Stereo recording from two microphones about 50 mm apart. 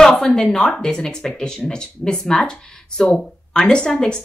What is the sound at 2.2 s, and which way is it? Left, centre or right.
Speech, centre.